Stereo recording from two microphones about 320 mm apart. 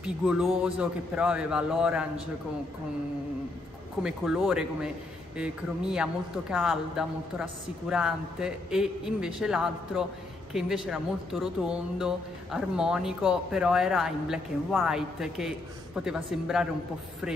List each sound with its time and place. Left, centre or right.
0.0 s speech: centre
4.0 s speech: centre